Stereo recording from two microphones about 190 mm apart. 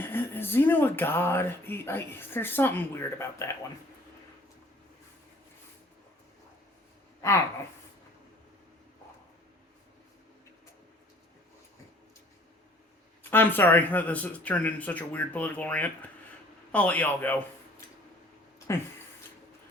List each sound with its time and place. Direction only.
0.0 s speech: 10° left (ahead or behind)
7.2 s speech: 15° left (ahead or behind)
13.3 s speech: 10° left (ahead or behind)